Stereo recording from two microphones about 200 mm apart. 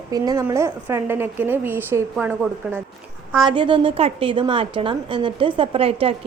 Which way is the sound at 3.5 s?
25° right (ahead or behind).